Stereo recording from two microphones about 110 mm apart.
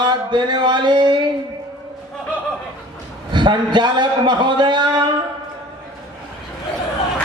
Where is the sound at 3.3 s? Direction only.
45° right (ahead or behind).